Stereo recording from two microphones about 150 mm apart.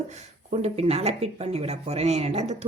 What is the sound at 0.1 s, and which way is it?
Speech, 45° right (ahead or behind).